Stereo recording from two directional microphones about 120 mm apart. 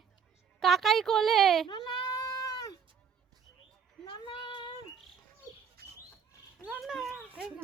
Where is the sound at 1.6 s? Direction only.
35° left (ahead or behind).